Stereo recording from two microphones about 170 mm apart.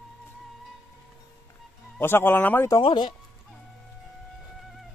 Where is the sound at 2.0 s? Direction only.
10° left (ahead or behind).